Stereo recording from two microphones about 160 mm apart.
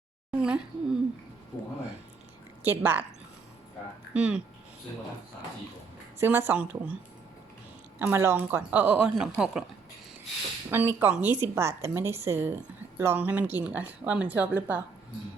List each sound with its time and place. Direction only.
0.3 s a sound: 5° right (ahead or behind)
2.6 s a woman's voice: 15° right (ahead or behind)
4.1 s speech: 5° right (ahead or behind)
6.1 s a woman's voice: 15° right (ahead or behind)
7.9 s a woman's voice: 15° right (ahead or behind)
10.7 s a woman's voice: 15° right (ahead or behind)